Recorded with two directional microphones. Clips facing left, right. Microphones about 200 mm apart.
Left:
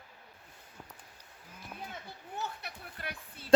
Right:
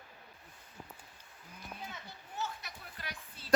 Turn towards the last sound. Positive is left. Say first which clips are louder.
# left 4 dB
turn(degrees=55)  # may be behind; listen again after turning